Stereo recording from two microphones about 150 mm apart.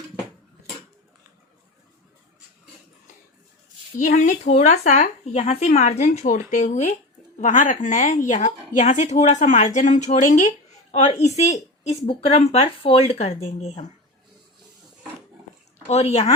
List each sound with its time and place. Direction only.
3.9 s a woman's voice: 55° left (ahead or behind)
15.9 s speech: 45° left (ahead or behind)